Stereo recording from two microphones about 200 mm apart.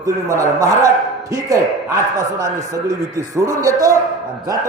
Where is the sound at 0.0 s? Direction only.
15° right (ahead or behind).